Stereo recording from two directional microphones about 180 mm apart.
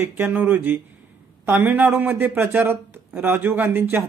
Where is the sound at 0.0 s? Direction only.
10° right (ahead or behind).